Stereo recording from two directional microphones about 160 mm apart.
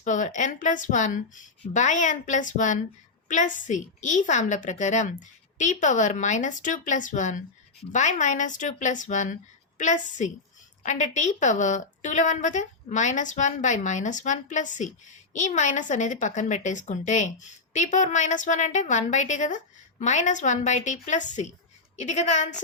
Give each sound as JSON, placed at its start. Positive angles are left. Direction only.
{"t": 0.0, "sound": "a woman's voice", "side_deg": 50}